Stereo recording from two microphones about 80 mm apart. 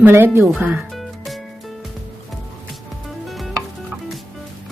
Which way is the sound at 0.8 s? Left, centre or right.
Centre.